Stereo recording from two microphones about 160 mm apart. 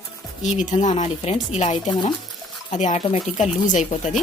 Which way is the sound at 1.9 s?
30° left (ahead or behind).